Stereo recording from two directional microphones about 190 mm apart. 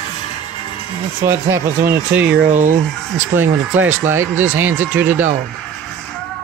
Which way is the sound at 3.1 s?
10° right (ahead or behind).